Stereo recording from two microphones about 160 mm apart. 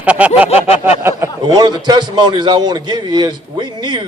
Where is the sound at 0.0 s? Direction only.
10° right (ahead or behind).